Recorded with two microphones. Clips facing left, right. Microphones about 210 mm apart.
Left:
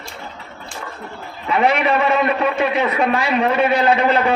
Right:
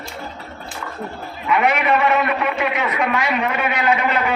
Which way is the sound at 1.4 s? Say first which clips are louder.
Left 1 dB; 30° left (ahead or behind).